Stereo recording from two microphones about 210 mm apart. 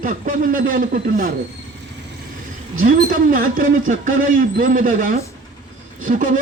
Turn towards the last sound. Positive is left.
turn(degrees=-40)  # may be behind; listen again after turning